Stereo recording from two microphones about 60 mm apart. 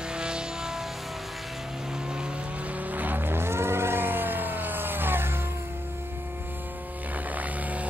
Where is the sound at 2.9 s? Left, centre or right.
Right.